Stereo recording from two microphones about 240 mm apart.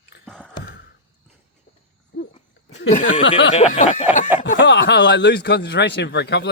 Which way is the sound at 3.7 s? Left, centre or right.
Left.